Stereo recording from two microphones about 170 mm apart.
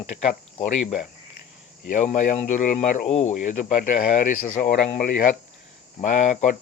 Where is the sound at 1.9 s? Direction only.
50° left (ahead or behind).